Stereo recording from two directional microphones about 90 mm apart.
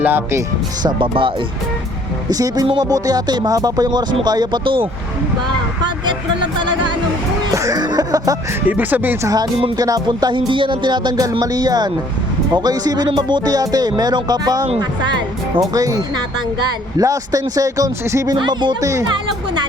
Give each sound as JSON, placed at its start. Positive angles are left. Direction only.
{"t": 0.0, "sound": "speech", "side_deg": -20}
{"t": 0.9, "sound": "speech", "side_deg": -70}
{"t": 2.3, "sound": "speech", "side_deg": -45}
{"t": 4.6, "sound": "speech", "side_deg": -75}
{"t": 5.8, "sound": "a sound", "side_deg": -60}
{"t": 7.5, "sound": "speech", "side_deg": -35}
{"t": 7.8, "sound": "speech", "side_deg": -50}
{"t": 8.6, "sound": "speech", "side_deg": -20}
{"t": 9.2, "sound": "speech", "side_deg": -45}
{"t": 10.1, "sound": "speech", "side_deg": -55}
{"t": 15.7, "sound": "speech", "side_deg": -40}
{"t": 18.3, "sound": "speech", "side_deg": -60}
{"t": 18.8, "sound": "speech", "side_deg": -35}